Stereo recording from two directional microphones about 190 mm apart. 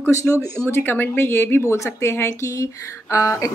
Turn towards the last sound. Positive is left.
turn(degrees=15)  # may be behind; listen again after turning